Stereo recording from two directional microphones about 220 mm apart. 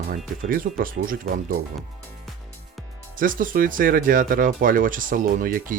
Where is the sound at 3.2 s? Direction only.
40° right (ahead or behind).